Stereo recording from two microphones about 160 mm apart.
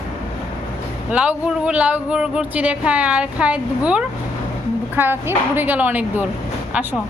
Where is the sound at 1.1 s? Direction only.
10° right (ahead or behind).